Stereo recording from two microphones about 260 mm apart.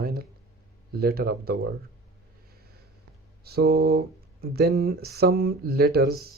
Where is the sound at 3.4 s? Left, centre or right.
Right.